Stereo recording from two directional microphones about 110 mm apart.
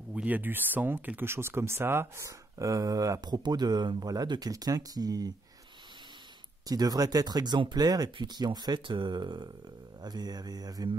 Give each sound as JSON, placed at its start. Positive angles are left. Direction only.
{"t": 0.1, "sound": "speech", "side_deg": -15}
{"t": 6.7, "sound": "speech", "side_deg": -35}